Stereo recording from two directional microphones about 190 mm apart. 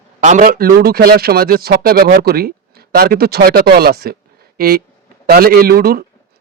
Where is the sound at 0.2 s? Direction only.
40° right (ahead or behind).